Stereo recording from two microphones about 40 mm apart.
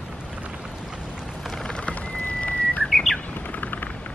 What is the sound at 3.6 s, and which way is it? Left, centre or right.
Vehicle, left.